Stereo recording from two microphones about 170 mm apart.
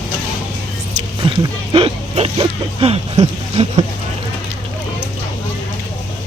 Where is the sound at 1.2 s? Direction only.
30° right (ahead or behind).